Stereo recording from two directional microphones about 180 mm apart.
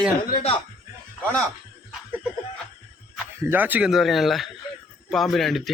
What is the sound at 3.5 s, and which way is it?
Speech, 10° right (ahead or behind).